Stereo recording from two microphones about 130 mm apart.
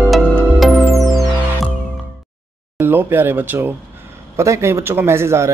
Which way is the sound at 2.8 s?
15° right (ahead or behind).